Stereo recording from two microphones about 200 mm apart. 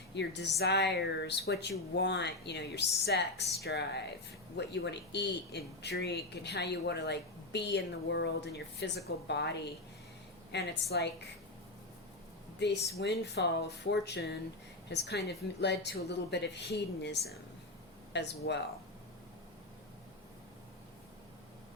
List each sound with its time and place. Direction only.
0.1 s a woman's voice: 60° left (ahead or behind)
12.5 s speech: 60° left (ahead or behind)